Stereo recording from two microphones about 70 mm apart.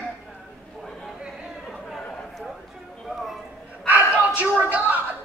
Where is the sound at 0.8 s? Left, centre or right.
Centre.